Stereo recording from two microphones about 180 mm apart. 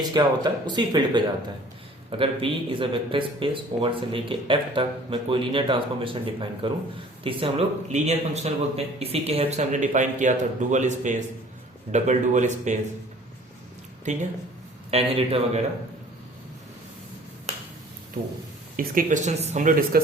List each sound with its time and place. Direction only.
0.0 s speech: 25° right (ahead or behind); by 12.8 s 40° right (ahead or behind)
14.0 s speech: 40° right (ahead or behind)
18.8 s speech: 50° right (ahead or behind)